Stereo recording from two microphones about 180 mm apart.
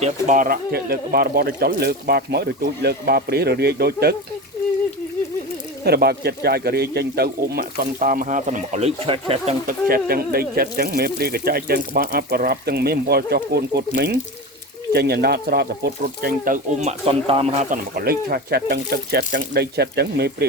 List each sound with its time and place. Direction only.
0.0 s speech: 45° right (ahead or behind); by 4.1 s 60° right (ahead or behind)
5.8 s speech: 60° right (ahead or behind); by 9.6 s 30° right (ahead or behind)
9.6 s speech: 55° right (ahead or behind)
17.1 s speech: 30° right (ahead or behind)
17.9 s speech: 60° right (ahead or behind)